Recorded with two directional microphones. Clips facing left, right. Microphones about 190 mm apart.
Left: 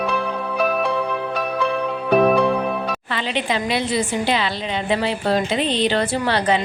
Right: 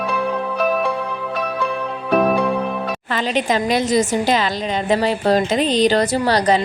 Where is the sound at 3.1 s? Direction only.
45° right (ahead or behind).